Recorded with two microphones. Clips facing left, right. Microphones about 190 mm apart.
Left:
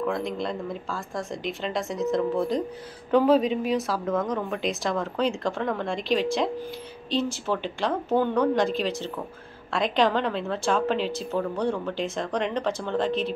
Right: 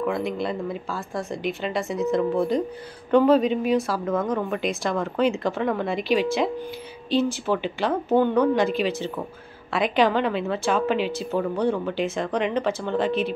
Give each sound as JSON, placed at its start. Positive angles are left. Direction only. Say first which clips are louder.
{"t": 0.0, "sound": "a woman's voice", "louder": "right 2 dB", "side_deg": -5}